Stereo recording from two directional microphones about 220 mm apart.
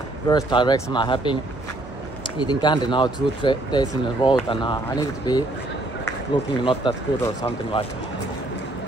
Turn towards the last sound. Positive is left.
turn(degrees=25)  # may be behind; listen again after turning